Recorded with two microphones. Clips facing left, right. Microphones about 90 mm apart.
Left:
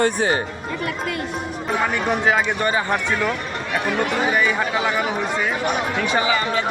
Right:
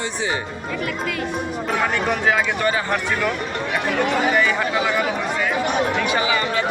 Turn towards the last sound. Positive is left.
turn(degrees=30)  # may be behind; listen again after turning